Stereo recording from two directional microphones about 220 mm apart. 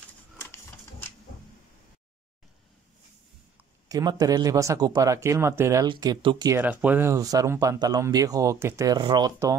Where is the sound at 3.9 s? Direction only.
15° right (ahead or behind).